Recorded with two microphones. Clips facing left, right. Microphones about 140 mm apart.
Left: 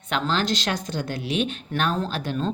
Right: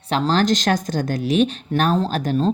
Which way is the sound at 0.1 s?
40° right (ahead or behind).